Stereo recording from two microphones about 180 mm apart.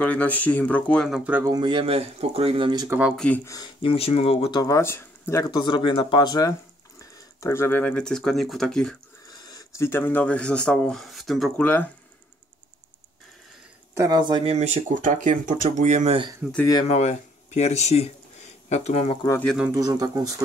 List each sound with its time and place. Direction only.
0.0 s speech: 10° left (ahead or behind); by 1.5 s 10° right (ahead or behind)
1.5 s speech: 25° right (ahead or behind)
3.0 s speech: 5° right (ahead or behind)
3.3 s speech: 15° left (ahead or behind)
9.4 s speech: 20° left (ahead or behind)
13.9 s speech: 20° right (ahead or behind); by 16.2 s 40° right (ahead or behind)
16.4 s speech: 5° right (ahead or behind)
16.8 s speech: 35° left (ahead or behind)
19.4 s speech: 5° right (ahead or behind)
19.7 s speech: 20° right (ahead or behind)